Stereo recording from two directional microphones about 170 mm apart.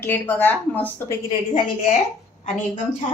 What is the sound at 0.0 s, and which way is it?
A woman's voice, 15° left (ahead or behind).